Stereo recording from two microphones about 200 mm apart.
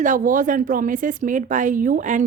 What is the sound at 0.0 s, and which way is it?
Speech, 40° right (ahead or behind).